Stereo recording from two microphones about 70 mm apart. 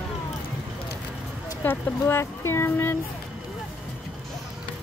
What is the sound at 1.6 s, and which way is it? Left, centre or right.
Speech, left.